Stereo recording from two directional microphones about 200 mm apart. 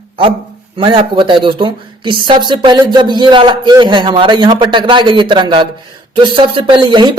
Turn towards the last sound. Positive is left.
turn(degrees=-20)  # may be behind; listen again after turning